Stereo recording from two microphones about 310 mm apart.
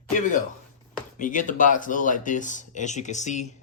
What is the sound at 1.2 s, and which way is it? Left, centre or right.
Speech, left.